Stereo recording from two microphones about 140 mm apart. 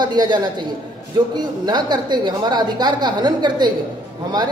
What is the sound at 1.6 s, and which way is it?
A woman's voice, 30° right (ahead or behind).